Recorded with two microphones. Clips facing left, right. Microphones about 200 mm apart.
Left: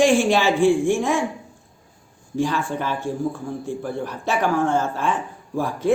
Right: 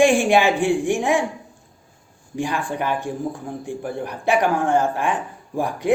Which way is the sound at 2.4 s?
15° right (ahead or behind).